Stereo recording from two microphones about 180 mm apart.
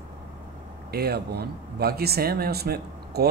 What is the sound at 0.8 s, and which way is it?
Speech, 60° right (ahead or behind).